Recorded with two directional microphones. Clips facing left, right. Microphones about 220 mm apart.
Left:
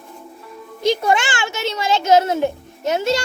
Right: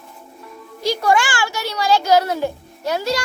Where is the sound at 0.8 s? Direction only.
20° left (ahead or behind).